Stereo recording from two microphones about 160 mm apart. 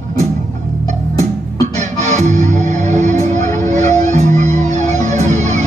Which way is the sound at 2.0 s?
45° right (ahead or behind).